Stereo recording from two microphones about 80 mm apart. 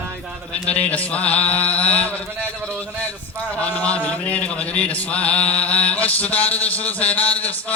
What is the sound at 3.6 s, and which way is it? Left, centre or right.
Mantra, centre.